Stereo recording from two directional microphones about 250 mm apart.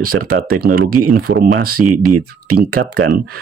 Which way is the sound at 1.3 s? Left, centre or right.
Right.